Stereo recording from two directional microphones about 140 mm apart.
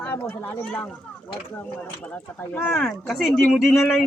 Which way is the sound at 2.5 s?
5° left (ahead or behind).